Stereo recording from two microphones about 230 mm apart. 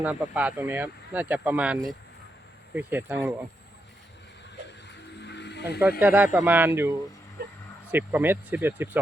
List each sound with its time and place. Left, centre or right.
0.0 s speech: centre
5.2 s music: left
6.0 s speech: centre
7.4 s a sound: right
7.9 s speech: centre